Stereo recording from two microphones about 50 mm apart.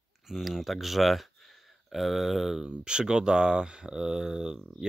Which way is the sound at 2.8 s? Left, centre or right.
Centre.